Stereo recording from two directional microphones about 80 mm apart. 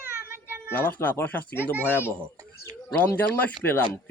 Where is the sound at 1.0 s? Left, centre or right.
Left.